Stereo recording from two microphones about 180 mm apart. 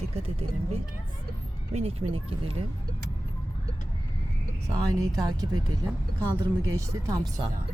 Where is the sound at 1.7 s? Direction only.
35° right (ahead or behind).